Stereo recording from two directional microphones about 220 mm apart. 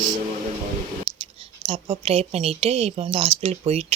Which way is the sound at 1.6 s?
25° right (ahead or behind).